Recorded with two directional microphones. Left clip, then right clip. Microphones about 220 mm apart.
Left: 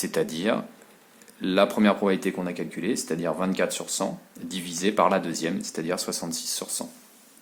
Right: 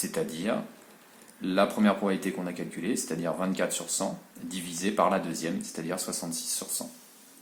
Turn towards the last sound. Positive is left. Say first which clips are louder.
# left 4 dB
turn(degrees=35)  # may be behind; listen again after turning